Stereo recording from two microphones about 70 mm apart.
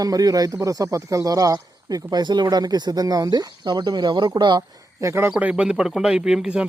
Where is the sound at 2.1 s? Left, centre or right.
Right.